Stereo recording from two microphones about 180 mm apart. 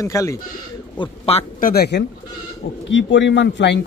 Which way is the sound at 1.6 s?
55° left (ahead or behind).